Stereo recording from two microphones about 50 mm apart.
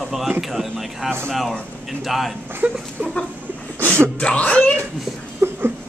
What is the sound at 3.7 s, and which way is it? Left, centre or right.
Speech, right.